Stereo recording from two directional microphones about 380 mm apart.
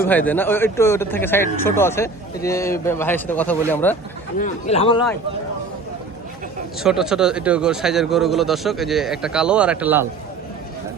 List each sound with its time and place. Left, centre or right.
0.0 s speech: centre
4.4 s a man's voice: centre
6.8 s speech: centre